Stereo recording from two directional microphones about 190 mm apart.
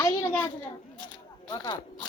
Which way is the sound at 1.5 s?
20° left (ahead or behind).